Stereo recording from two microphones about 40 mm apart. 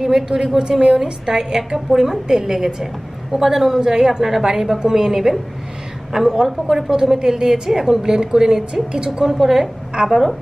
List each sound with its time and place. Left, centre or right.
0.0 s a woman's voice: centre